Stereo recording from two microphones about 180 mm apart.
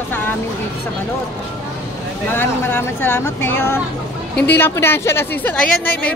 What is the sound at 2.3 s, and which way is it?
Speech, 10° left (ahead or behind).